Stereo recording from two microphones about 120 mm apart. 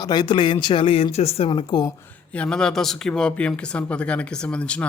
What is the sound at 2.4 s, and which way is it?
Speech, 5° left (ahead or behind).